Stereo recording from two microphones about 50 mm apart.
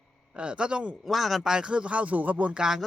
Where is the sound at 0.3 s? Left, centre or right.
Right.